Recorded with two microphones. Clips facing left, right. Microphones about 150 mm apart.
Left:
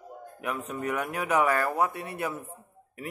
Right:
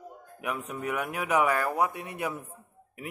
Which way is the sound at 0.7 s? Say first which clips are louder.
Left 2 dB; 10° right (ahead or behind).